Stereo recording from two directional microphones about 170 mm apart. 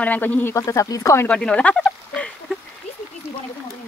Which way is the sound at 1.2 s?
5° left (ahead or behind).